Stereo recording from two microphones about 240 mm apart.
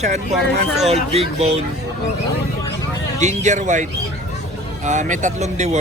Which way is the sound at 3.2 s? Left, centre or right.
Right.